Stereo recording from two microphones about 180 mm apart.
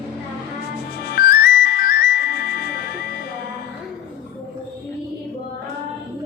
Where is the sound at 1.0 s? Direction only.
60° left (ahead or behind).